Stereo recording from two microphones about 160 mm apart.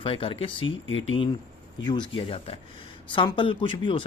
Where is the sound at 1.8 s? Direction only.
30° left (ahead or behind).